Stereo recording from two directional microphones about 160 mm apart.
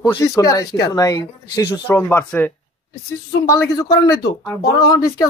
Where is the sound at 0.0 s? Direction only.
20° left (ahead or behind).